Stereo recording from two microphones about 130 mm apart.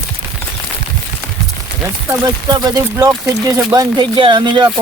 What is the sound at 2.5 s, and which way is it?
Speech, 30° right (ahead or behind).